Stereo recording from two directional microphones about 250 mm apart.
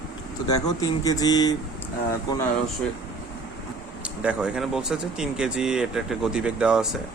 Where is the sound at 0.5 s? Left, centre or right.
Centre.